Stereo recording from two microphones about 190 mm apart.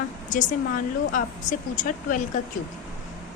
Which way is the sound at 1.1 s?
45° left (ahead or behind).